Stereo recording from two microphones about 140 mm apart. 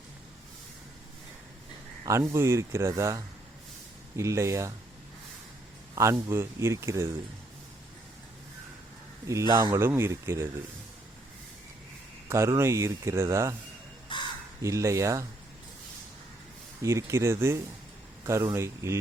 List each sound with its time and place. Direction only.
2.0 s speech: 20° right (ahead or behind)
5.9 s speech: 25° right (ahead or behind)
9.5 s speech: 30° right (ahead or behind)
9.8 s speech: 15° right (ahead or behind)
12.3 s speech: 20° right (ahead or behind)
14.6 s speech: 20° right (ahead or behind)
16.8 s speech: 20° right (ahead or behind)